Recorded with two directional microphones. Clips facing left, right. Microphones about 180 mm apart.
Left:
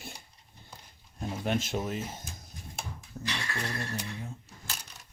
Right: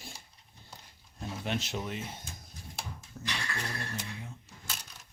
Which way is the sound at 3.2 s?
35° left (ahead or behind).